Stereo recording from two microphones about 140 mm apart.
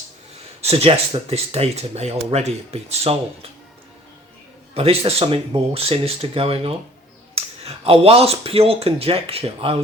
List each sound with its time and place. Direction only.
0.6 s speech: 45° right (ahead or behind)
4.7 s speech: 45° right (ahead or behind)